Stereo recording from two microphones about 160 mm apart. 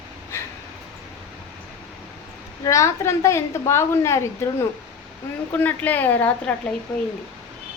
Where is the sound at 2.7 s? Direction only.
20° left (ahead or behind).